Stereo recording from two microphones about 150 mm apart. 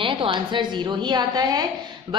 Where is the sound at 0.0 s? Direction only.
35° right (ahead or behind).